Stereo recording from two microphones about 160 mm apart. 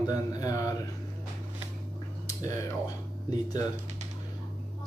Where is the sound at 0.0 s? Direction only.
25° left (ahead or behind).